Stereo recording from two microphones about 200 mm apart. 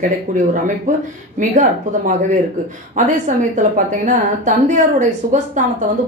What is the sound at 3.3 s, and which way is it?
A woman's voice, 35° right (ahead or behind).